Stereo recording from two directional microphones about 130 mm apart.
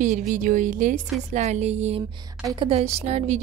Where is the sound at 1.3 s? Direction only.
60° right (ahead or behind).